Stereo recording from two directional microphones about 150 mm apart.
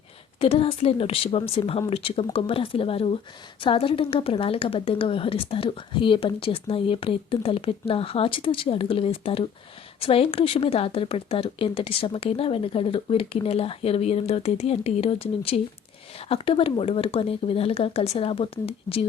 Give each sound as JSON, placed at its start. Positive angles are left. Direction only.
{"t": 0.3, "sound": "a woman's voice", "side_deg": 40}